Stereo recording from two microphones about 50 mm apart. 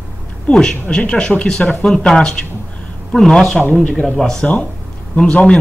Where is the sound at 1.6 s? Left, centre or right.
Centre.